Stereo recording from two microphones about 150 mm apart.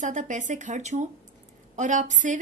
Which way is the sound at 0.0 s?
55° right (ahead or behind).